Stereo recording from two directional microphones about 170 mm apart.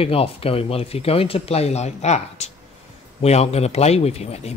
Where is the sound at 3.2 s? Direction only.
40° left (ahead or behind).